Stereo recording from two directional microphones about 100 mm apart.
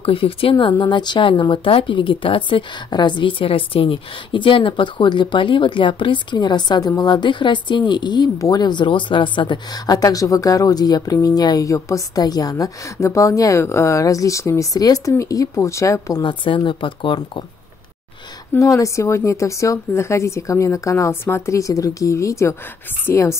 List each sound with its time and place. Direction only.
0.0 s speech: 70° left (ahead or behind); by 16.2 s 30° left (ahead or behind)
16.2 s speech: 55° left (ahead or behind)
18.6 s speech: 30° left (ahead or behind)